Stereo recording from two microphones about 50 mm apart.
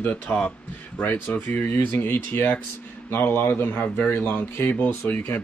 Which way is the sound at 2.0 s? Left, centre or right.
Left.